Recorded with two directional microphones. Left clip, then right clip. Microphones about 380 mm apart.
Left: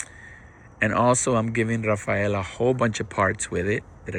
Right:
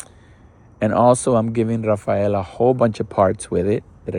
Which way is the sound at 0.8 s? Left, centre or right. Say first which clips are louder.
Right 5 dB; centre.